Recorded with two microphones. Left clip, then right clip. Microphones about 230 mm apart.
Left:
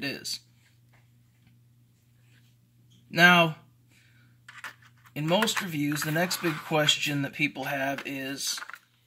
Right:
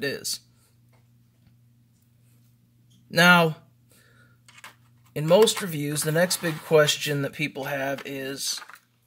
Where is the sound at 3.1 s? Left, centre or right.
Right.